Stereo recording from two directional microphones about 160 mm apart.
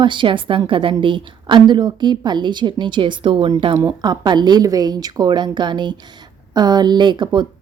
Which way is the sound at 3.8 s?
20° right (ahead or behind).